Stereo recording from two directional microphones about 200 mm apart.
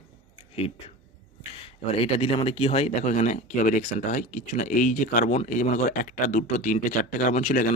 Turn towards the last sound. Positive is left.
turn(degrees=40)  # may be behind; listen again after turning